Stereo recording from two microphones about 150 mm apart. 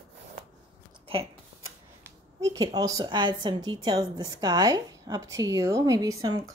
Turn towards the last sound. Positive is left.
turn(degrees=-30)  # may be behind; listen again after turning